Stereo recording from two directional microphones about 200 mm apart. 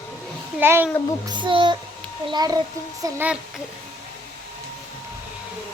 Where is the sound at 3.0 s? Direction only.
10° right (ahead or behind).